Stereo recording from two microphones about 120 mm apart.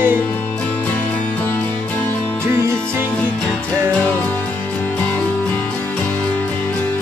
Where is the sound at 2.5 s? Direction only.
20° right (ahead or behind).